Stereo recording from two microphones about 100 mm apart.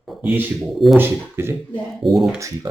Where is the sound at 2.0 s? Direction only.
Centre (ahead or behind).